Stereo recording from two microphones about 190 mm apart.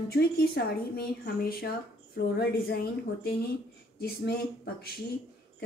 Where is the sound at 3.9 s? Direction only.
55° left (ahead or behind).